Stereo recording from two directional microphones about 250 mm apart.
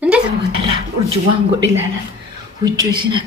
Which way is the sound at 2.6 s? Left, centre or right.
Centre.